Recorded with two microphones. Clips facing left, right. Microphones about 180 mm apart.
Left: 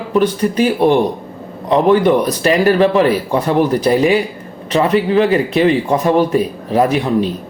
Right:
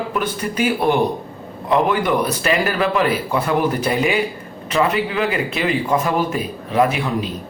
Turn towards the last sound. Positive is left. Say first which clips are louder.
# left 5 dB
turn(degrees=35)  # may be behind; listen again after turning